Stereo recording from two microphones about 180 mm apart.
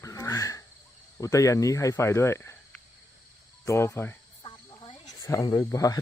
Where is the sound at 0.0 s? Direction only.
20° left (ahead or behind).